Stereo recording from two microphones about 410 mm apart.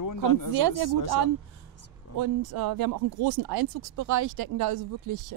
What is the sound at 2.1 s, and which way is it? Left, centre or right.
Speech, right.